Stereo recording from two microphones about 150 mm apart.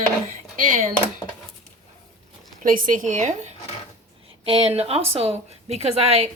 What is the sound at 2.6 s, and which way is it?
Speech, 65° right (ahead or behind).